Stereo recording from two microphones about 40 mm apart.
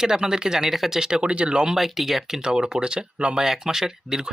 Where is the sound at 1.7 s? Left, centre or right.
Centre; by 3.4 s right.